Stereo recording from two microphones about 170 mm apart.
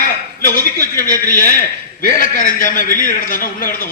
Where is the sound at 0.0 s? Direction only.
55° left (ahead or behind).